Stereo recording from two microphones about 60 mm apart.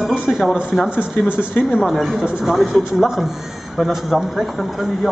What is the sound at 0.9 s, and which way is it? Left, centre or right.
Speech, centre.